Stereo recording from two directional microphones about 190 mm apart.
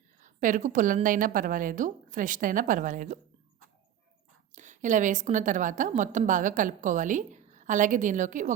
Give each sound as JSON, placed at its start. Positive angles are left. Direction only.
{"t": 0.2, "sound": "a woman's voice", "side_deg": -45}
{"t": 4.5, "sound": "a woman's voice", "side_deg": -40}